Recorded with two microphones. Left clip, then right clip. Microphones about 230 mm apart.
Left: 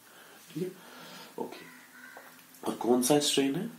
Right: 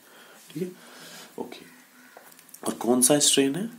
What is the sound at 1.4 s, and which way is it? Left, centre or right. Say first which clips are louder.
Speech: right 1 dB; right.